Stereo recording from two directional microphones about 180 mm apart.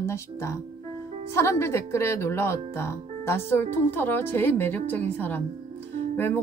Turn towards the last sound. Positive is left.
turn(degrees=10)  # may be behind; listen again after turning